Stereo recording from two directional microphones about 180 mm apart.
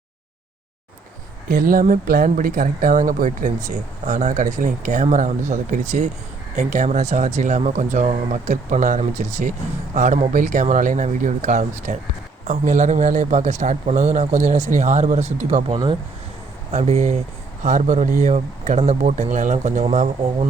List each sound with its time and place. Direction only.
1.5 s speech: 50° right (ahead or behind); by 16.0 s 30° right (ahead or behind)
16.7 s speech: 40° right (ahead or behind)